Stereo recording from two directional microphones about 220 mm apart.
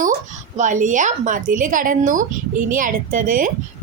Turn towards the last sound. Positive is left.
turn(degrees=-35)  # may be behind; listen again after turning